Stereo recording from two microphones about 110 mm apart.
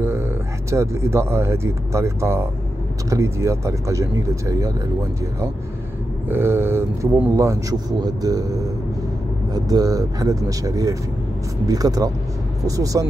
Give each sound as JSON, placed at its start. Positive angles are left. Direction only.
{"t": 0.0, "sound": "speech", "side_deg": -25}
{"t": 6.2, "sound": "speech", "side_deg": -20}